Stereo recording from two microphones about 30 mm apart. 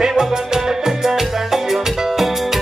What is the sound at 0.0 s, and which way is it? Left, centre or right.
Music, right.